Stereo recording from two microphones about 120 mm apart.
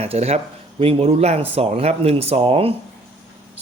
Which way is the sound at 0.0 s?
60° right (ahead or behind).